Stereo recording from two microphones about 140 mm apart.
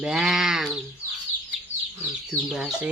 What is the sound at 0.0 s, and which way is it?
Sheep, centre (ahead or behind).